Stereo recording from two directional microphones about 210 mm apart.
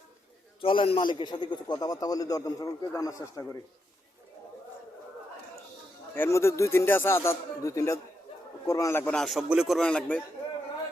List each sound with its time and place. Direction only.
0.6 s a man's voice: 25° left (ahead or behind)
6.1 s a man's voice: 10° left (ahead or behind)